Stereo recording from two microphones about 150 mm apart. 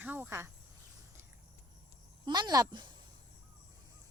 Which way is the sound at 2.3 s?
30° right (ahead or behind).